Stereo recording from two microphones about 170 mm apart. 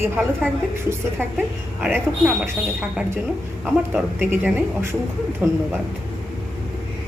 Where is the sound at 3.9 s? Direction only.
10° right (ahead or behind).